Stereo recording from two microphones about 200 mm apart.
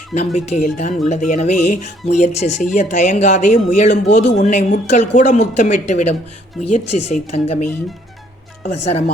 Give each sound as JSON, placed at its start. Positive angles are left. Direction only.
{"t": 0.3, "sound": "speech", "side_deg": 35}
{"t": 8.7, "sound": "speech", "side_deg": 35}